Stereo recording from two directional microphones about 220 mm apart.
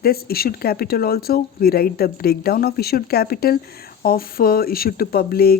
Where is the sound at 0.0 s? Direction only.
45° left (ahead or behind).